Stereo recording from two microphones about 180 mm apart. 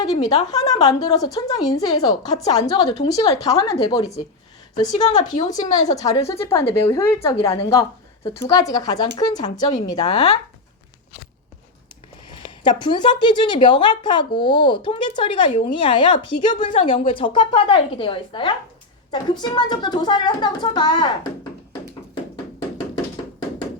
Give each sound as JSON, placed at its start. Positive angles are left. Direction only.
{"t": 0.0, "sound": "speech", "side_deg": 20}
{"t": 12.6, "sound": "speech", "side_deg": 25}